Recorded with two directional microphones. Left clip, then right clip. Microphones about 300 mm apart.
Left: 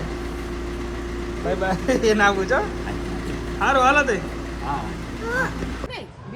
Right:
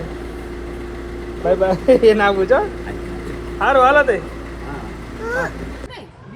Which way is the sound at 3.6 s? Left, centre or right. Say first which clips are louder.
Right 5 dB; centre.